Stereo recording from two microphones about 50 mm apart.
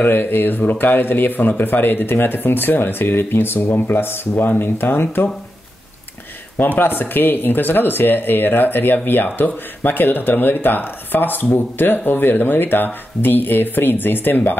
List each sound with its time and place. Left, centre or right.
0.0 s speech: left
6.6 s speech: left